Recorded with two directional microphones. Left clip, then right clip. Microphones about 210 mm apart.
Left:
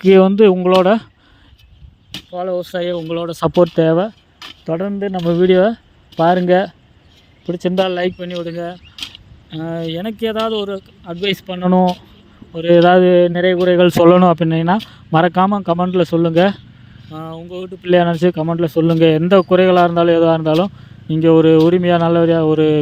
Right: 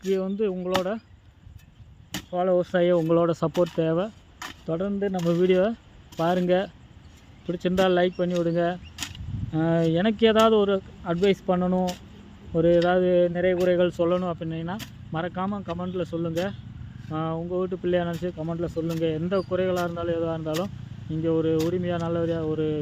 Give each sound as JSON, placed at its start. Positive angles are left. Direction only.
{"t": 0.1, "sound": "speech", "side_deg": 45}
{"t": 2.3, "sound": "speech", "side_deg": 45}
{"t": 3.1, "sound": "speech", "side_deg": 10}
{"t": 3.3, "sound": "speech", "side_deg": 40}
{"t": 8.5, "sound": "mechanisms", "side_deg": 0}
{"t": 9.6, "sound": "speech", "side_deg": 0}
{"t": 11.2, "sound": "speech", "side_deg": 50}
{"t": 17.1, "sound": "speech", "side_deg": -5}
{"t": 17.8, "sound": "speech", "side_deg": 45}